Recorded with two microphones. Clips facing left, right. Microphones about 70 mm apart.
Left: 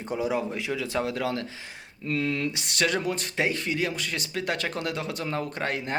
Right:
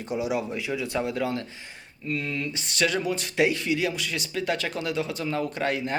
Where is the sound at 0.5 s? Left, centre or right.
Left.